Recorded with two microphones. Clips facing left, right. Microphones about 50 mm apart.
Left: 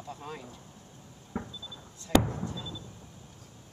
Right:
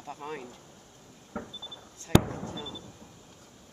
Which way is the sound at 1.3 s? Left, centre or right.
Centre.